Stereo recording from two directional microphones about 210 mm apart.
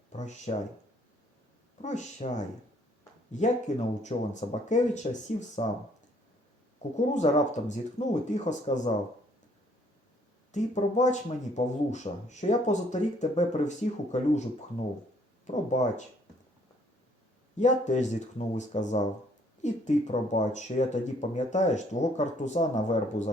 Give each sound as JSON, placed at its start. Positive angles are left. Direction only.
{"t": 0.2, "sound": "speech", "side_deg": 35}
{"t": 1.8, "sound": "speech", "side_deg": 35}
{"t": 6.9, "sound": "speech", "side_deg": 35}
{"t": 10.5, "sound": "speech", "side_deg": 35}
{"t": 15.4, "sound": "speech", "side_deg": 35}
{"t": 17.6, "sound": "speech", "side_deg": 35}